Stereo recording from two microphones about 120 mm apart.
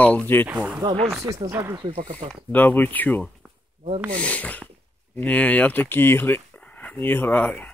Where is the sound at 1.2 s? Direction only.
25° right (ahead or behind).